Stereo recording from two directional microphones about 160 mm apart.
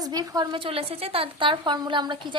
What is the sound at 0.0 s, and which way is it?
A woman's voice, 25° right (ahead or behind).